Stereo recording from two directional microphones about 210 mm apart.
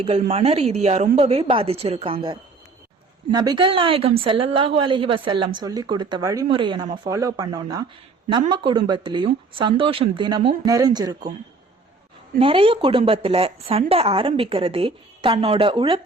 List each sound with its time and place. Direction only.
0.0 s a woman's voice: 30° right (ahead or behind)
12.4 s a woman's voice: 25° right (ahead or behind)